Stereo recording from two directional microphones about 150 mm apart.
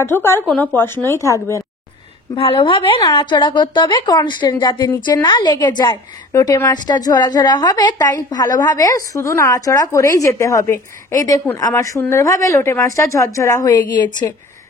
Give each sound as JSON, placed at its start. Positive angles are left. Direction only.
{"t": 0.0, "sound": "a woman's voice", "side_deg": 15}
{"t": 2.3, "sound": "a woman's voice", "side_deg": 35}